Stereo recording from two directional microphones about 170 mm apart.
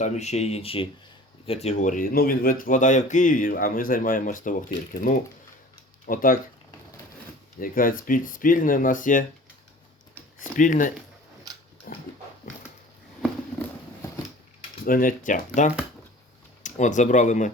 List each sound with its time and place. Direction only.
0.0 s speech: 40° left (ahead or behind)
7.6 s speech: 55° left (ahead or behind)
10.6 s speech: 50° left (ahead or behind)
11.9 s dog: 55° left (ahead or behind)
14.8 s speech: 55° left (ahead or behind)